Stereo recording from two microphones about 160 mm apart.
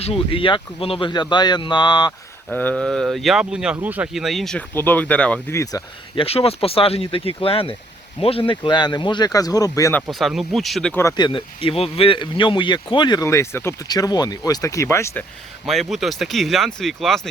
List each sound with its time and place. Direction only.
0.0 s speech: 35° left (ahead or behind)
2.5 s speech: 10° left (ahead or behind)
4.7 s speech: 15° left (ahead or behind)
5.7 s speech: 25° left (ahead or behind)
6.1 s speech: 35° left (ahead or behind); by 9.9 s 20° left (ahead or behind)
10.1 s speech: centre (ahead or behind)
11.2 s speech: 30° left (ahead or behind)
15.6 s speech: centre (ahead or behind)